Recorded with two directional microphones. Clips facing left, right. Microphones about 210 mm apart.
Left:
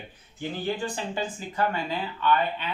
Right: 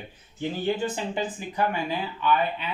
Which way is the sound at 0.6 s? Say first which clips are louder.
Right 3 dB; 20° right (ahead or behind).